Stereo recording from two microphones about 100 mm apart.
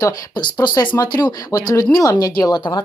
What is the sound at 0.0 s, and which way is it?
Speech, 40° left (ahead or behind).